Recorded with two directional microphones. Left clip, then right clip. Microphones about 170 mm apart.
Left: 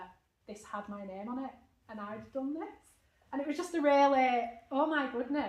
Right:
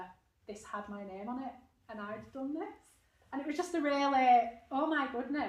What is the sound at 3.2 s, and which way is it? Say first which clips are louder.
A woman's voice: left 1 dB; 20° left (ahead or behind).